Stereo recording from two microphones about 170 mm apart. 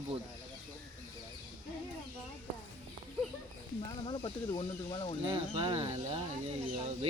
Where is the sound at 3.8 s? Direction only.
25° left (ahead or behind).